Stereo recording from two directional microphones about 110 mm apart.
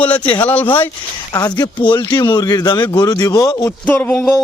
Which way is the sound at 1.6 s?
45° left (ahead or behind).